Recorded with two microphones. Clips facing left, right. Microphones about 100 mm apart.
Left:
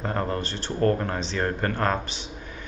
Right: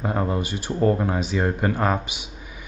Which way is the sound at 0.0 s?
10° right (ahead or behind).